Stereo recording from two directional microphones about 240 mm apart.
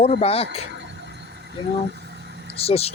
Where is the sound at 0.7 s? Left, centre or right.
Right.